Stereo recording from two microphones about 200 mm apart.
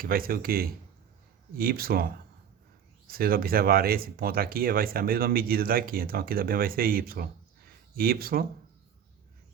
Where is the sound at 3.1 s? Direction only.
50° right (ahead or behind).